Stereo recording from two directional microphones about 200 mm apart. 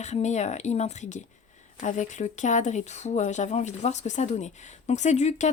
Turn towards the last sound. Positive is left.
turn(degrees=35)  # may be behind; listen again after turning